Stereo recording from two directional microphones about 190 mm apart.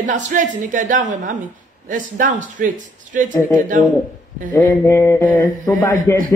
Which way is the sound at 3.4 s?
10° left (ahead or behind).